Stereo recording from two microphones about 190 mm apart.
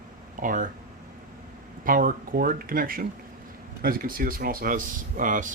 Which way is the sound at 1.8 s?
45° right (ahead or behind).